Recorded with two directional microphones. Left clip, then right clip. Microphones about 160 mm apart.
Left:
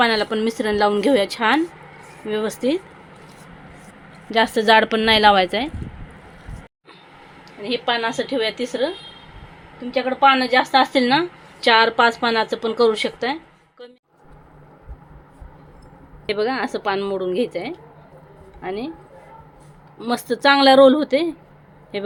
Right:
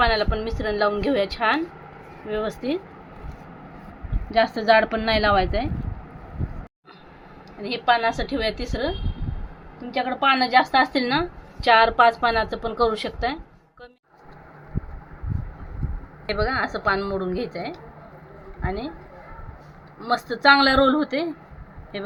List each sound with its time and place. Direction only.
0.0 s a woman's voice: 70° left (ahead or behind)
2.3 s speech: 60° left (ahead or behind)
4.3 s a woman's voice: 50° left (ahead or behind)
7.6 s a woman's voice: 40° left (ahead or behind)
9.9 s a woman's voice: 35° left (ahead or behind); by 13.4 s 50° left (ahead or behind)
16.3 s a woman's voice: 80° left
18.6 s speech: 60° left (ahead or behind)
20.1 s a woman's voice: 75° left (ahead or behind)